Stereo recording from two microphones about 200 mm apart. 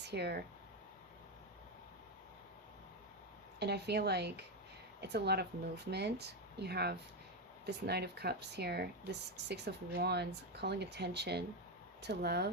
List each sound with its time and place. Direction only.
0.0 s speech: 55° right (ahead or behind)
3.6 s speech: 55° right (ahead or behind)